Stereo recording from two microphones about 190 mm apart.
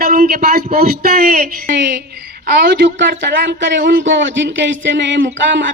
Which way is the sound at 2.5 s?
65° right (ahead or behind).